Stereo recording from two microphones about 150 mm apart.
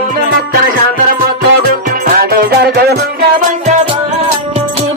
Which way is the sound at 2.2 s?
90° right.